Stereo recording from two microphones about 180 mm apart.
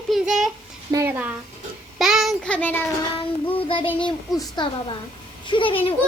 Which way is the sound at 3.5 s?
30° left (ahead or behind).